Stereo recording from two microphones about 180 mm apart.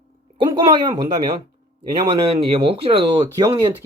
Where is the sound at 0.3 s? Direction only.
25° right (ahead or behind).